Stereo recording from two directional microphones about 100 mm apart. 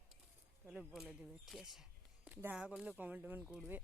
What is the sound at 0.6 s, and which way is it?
Speech, 5° right (ahead or behind).